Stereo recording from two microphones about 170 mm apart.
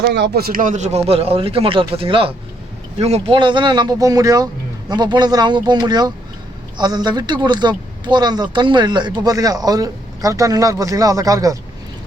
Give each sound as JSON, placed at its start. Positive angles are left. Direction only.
{"t": 0.1, "sound": "speech", "side_deg": -75}